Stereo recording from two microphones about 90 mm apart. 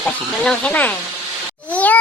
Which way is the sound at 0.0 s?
10° left (ahead or behind).